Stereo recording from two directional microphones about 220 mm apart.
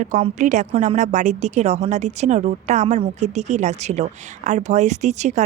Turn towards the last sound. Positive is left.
turn(degrees=-30)  # may be behind; listen again after turning